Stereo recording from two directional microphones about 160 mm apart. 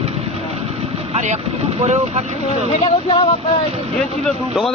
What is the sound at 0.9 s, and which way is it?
Speech, 45° right (ahead or behind).